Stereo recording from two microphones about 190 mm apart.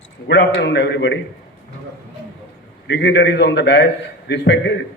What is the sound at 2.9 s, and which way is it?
A man's voice, 65° left (ahead or behind).